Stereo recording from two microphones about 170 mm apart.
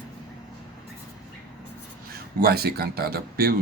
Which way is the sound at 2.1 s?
65° right (ahead or behind).